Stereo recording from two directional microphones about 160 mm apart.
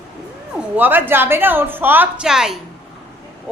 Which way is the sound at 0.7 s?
10° right (ahead or behind).